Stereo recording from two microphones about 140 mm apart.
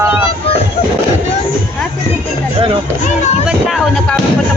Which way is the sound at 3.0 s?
55° left (ahead or behind).